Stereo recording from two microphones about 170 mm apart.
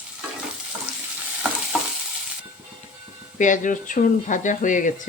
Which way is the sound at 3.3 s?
50° left (ahead or behind).